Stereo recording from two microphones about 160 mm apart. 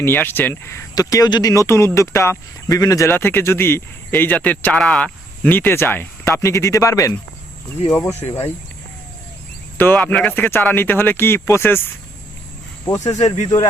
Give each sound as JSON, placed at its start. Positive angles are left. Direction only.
{"t": 0.0, "sound": "speech", "side_deg": 15}
{"t": 8.3, "sound": "speech", "side_deg": 40}
{"t": 9.7, "sound": "speech", "side_deg": 10}
{"t": 13.1, "sound": "speech", "side_deg": 45}